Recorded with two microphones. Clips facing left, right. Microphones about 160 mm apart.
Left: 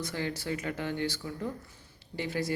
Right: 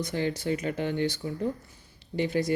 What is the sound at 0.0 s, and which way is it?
Speech, 20° right (ahead or behind).